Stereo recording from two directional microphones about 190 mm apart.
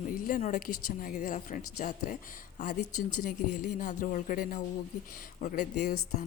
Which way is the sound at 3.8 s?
40° left (ahead or behind).